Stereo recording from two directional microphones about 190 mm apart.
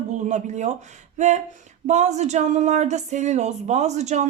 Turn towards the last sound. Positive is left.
turn(degrees=-35)  # may be behind; listen again after turning